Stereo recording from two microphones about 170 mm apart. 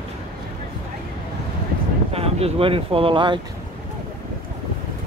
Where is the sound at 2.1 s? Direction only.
35° right (ahead or behind).